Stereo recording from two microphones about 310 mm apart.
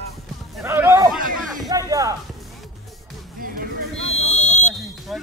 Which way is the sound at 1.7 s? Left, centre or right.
Centre.